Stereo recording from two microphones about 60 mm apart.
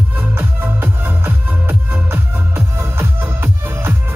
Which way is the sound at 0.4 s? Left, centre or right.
Right.